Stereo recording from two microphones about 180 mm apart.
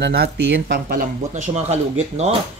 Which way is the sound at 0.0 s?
65° right (ahead or behind).